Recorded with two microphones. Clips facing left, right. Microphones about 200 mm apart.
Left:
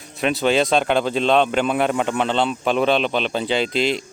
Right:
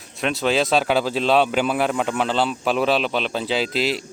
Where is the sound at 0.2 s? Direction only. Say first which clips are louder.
Left 2 dB; centre (ahead or behind).